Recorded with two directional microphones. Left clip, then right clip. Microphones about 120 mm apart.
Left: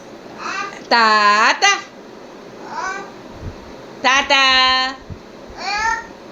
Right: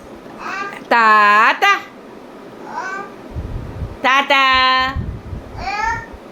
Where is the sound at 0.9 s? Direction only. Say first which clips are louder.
Right 2 dB; 30° right (ahead or behind).